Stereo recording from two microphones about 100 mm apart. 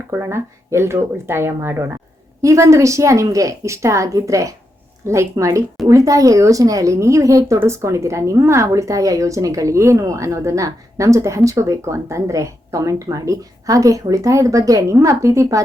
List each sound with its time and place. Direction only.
0.1 s a woman's voice: 25° right (ahead or behind)